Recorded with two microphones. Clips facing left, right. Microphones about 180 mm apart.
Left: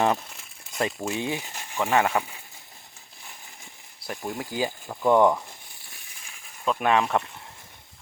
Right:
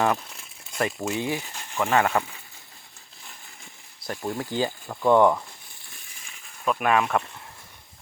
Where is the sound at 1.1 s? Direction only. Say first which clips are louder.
Right 1 dB; 20° left (ahead or behind).